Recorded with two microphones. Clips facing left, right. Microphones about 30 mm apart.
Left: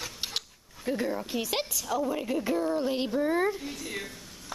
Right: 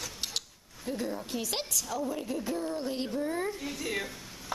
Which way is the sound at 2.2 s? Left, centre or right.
Left.